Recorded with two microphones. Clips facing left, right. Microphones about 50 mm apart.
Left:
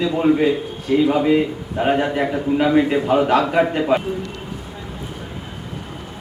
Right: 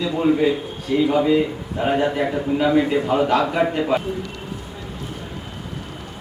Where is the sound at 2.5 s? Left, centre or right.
Left.